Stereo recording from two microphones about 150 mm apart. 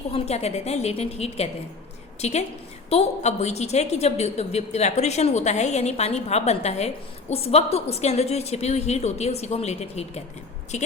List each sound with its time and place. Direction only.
0.1 s a woman's voice: 45° left (ahead or behind)